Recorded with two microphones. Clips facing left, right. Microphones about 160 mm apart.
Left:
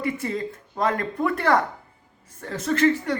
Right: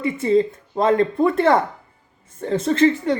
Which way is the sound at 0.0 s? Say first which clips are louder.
Right 9 dB; 25° right (ahead or behind).